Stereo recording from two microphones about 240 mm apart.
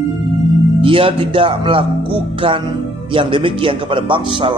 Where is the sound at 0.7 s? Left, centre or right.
Right.